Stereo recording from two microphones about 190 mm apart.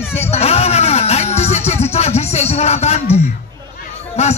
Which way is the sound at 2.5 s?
35° left (ahead or behind).